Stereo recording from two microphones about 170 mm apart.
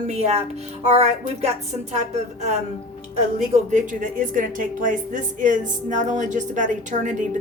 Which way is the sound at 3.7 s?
45° right (ahead or behind).